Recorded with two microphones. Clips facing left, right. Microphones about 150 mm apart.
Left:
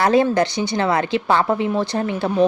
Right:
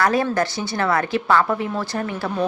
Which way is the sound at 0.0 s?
25° left (ahead or behind).